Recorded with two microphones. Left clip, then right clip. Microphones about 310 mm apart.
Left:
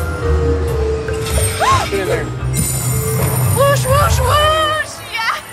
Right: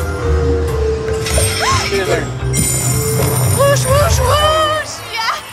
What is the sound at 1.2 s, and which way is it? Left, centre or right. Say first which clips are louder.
Music: left 2 dB; centre.